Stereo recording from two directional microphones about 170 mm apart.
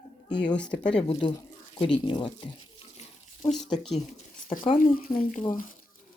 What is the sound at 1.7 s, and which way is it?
Speech, 30° left (ahead or behind).